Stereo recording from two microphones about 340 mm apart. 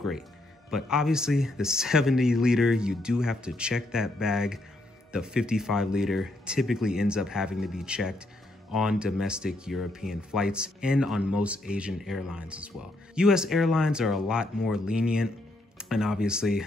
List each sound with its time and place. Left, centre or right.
0.7 s speech: centre